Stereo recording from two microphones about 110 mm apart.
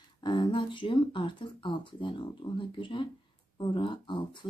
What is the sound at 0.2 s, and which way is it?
Speech, 45° left (ahead or behind).